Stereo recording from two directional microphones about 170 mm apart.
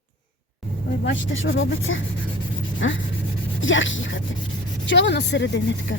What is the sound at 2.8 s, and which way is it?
Speech, 90° left.